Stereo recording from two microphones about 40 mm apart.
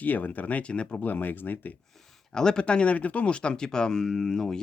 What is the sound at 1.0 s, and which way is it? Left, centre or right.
Speech, left.